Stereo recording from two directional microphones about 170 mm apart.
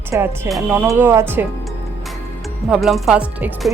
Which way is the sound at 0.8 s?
10° right (ahead or behind).